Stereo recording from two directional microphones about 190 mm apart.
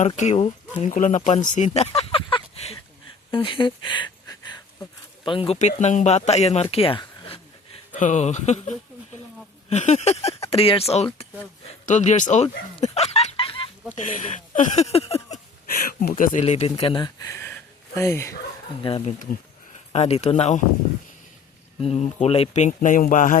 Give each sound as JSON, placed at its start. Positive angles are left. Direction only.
{"t": 0.2, "sound": "speech", "side_deg": 40}
{"t": 2.0, "sound": "a sound", "side_deg": 30}
{"t": 3.3, "sound": "speech", "side_deg": 25}
{"t": 7.9, "sound": "speech", "side_deg": 40}
{"t": 13.9, "sound": "speech", "side_deg": 40}
{"t": 15.7, "sound": "speech", "side_deg": 50}
{"t": 18.8, "sound": "speech", "side_deg": 25}
{"t": 21.8, "sound": "speech", "side_deg": 35}